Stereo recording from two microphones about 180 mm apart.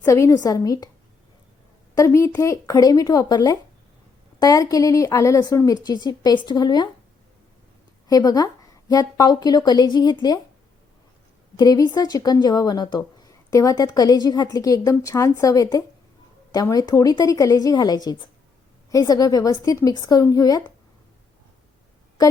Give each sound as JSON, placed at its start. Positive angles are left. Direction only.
{"t": 0.0, "sound": "speech", "side_deg": 15}
{"t": 2.0, "sound": "speech", "side_deg": 15}
{"t": 8.0, "sound": "speech", "side_deg": 20}
{"t": 11.5, "sound": "speech", "side_deg": 20}